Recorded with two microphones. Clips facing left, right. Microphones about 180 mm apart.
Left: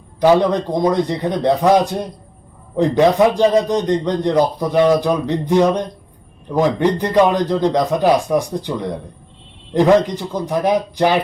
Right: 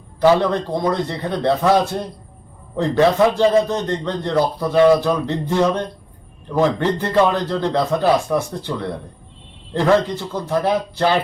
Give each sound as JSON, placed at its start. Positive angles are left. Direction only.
{"t": 0.2, "sound": "a man's voice", "side_deg": 15}